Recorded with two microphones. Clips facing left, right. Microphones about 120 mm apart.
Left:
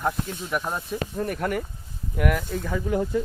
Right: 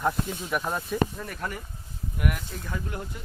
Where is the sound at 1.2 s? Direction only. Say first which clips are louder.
Left 8 dB; 60° left (ahead or behind).